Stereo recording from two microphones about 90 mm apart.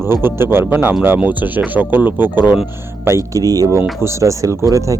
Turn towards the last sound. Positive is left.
turn(degrees=-35)  # may be behind; listen again after turning